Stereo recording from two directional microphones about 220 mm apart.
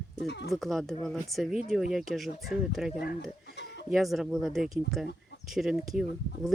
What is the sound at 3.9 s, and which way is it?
Speech, centre (ahead or behind).